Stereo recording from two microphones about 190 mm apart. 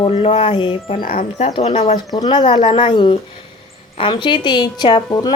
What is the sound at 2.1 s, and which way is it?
A woman's voice, 20° left (ahead or behind).